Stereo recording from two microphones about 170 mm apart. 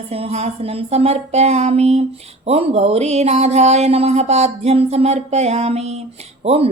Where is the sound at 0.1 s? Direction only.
35° right (ahead or behind).